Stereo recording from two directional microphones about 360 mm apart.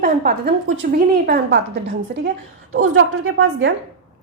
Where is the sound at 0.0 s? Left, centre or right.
Right.